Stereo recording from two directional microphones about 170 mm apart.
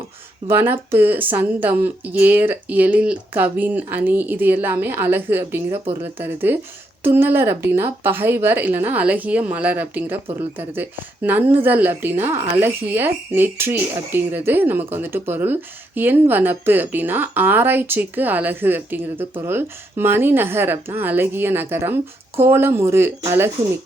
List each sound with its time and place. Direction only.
0.4 s speech: 15° right (ahead or behind)